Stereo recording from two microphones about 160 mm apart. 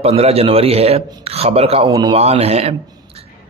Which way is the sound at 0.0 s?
40° right (ahead or behind).